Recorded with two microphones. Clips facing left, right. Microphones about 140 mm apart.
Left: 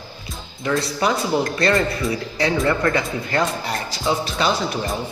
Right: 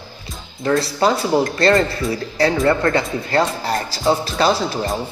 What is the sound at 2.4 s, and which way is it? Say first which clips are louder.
Speech: right 3 dB; 35° right (ahead or behind).